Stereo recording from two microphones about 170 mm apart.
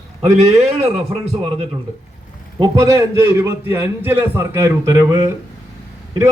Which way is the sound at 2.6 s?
20° right (ahead or behind).